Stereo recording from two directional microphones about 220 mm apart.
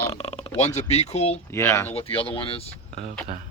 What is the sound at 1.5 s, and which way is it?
Speech, 10° left (ahead or behind).